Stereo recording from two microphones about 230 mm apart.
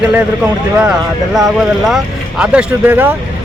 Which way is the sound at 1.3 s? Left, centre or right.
Centre.